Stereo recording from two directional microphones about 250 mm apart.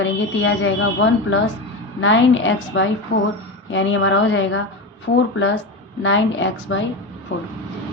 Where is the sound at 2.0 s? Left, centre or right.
Left.